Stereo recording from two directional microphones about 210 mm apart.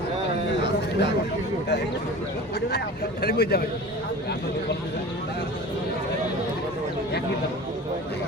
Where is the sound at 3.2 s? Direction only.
45° left (ahead or behind).